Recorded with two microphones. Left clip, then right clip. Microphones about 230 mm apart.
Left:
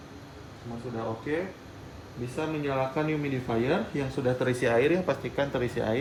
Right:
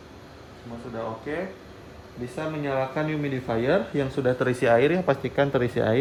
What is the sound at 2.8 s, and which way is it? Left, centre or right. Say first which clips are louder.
Speech: right 2 dB; centre.